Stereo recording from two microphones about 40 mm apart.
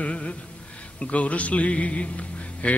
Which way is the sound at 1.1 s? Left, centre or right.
Left.